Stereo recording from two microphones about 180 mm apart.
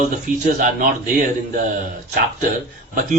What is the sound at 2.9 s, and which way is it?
Speech, 45° right (ahead or behind).